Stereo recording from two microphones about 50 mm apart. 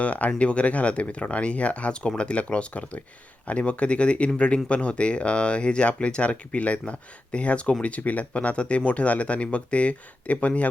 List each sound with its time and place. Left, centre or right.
0.0 s speech: left